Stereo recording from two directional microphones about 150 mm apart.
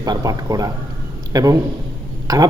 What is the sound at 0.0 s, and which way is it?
A man's voice, 25° right (ahead or behind).